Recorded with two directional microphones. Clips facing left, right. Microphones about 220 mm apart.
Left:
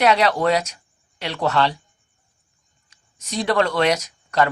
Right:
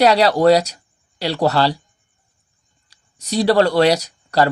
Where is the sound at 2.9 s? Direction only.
35° right (ahead or behind).